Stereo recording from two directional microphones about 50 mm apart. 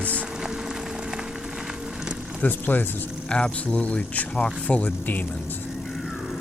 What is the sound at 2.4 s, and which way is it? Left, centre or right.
Speech, left.